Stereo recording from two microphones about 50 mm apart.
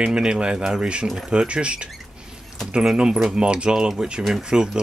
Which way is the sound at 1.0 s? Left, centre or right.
Centre.